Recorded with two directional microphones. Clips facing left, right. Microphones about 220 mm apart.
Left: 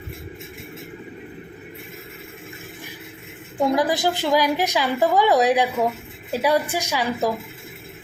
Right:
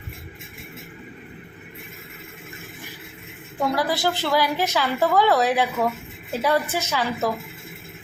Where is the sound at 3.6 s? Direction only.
20° left (ahead or behind).